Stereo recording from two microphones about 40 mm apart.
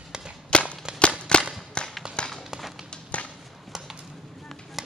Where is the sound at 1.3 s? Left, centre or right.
Left.